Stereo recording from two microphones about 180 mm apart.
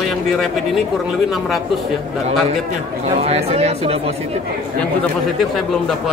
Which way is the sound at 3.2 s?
35° right (ahead or behind).